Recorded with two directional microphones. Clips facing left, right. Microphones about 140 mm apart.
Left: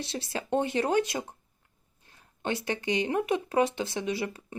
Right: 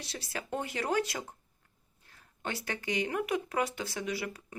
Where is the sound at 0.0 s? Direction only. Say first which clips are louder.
Left 6 dB; 25° left (ahead or behind).